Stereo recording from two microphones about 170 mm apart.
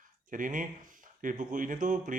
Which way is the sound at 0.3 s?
50° right (ahead or behind).